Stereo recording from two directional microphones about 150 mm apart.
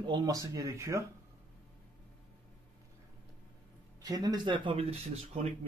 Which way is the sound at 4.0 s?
25° right (ahead or behind).